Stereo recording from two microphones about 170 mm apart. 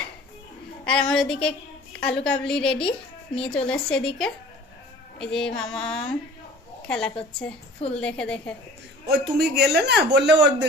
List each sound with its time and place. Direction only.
0.9 s female singing: 5° left (ahead or behind)
6.8 s a woman's voice: 5° left (ahead or behind)
9.0 s a man's voice: 70° right (ahead or behind); by 10.7 s 90° right